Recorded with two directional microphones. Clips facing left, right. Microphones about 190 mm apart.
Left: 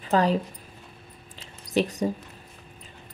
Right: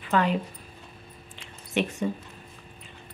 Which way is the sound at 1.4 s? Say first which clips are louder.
Left 3 dB; 40° left (ahead or behind).